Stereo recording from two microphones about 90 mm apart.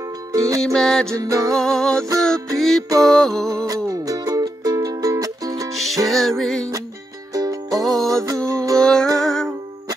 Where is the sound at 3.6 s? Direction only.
40° right (ahead or behind).